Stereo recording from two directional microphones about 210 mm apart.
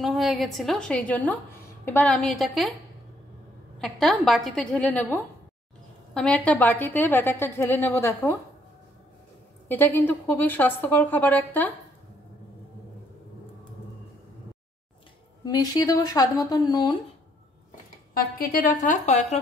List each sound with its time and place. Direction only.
0.0 s a woman's voice: centre (ahead or behind)
3.8 s a woman's voice: centre (ahead or behind)
9.7 s a woman's voice: 10° left (ahead or behind)
15.4 s a woman's voice: 20° left (ahead or behind)
18.1 s a woman's voice: 45° left (ahead or behind)